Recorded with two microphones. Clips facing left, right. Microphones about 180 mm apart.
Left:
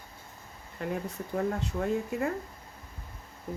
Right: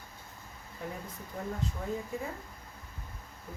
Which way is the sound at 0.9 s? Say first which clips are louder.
Left 9 dB; 70° left (ahead or behind).